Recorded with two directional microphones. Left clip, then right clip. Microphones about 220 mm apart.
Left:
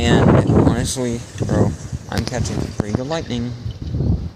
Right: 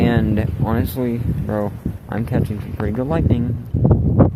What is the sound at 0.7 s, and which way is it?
Speech, 10° right (ahead or behind).